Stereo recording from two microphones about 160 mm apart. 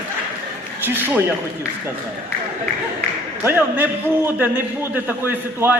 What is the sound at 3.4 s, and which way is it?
A man's voice, 10° right (ahead or behind).